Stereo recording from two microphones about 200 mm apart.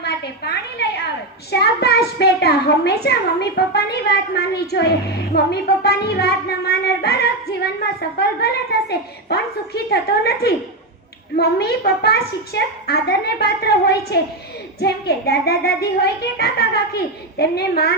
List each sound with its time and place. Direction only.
0.0 s a woman's voice: 55° left (ahead or behind)